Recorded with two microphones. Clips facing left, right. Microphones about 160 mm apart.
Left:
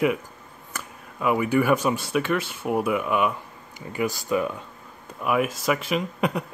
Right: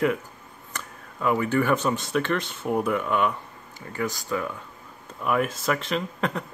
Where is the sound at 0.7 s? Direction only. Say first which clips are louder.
Left 1 dB; 10° left (ahead or behind).